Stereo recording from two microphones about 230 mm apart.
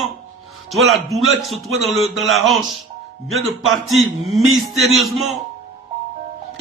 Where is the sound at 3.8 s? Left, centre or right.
Centre.